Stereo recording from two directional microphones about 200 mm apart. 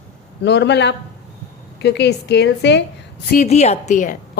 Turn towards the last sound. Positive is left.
turn(degrees=40)  # may be behind; listen again after turning